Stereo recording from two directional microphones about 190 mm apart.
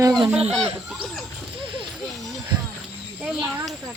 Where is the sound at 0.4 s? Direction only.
30° right (ahead or behind).